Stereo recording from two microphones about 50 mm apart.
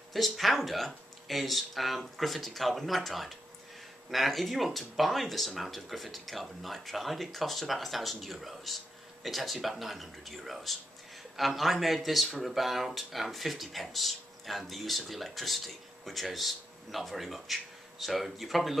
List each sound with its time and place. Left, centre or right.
0.1 s speech: centre